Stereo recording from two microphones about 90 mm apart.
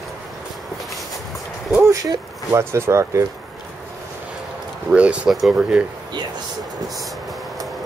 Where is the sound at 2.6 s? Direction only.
30° right (ahead or behind).